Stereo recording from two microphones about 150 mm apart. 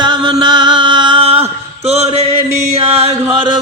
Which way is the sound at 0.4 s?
30° right (ahead or behind).